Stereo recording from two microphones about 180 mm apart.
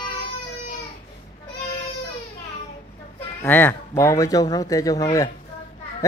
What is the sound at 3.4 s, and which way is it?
Speech, 10° left (ahead or behind).